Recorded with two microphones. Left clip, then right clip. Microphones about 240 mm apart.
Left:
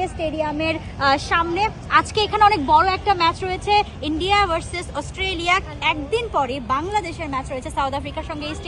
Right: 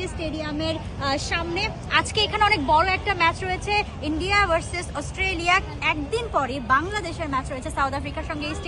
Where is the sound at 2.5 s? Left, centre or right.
Left.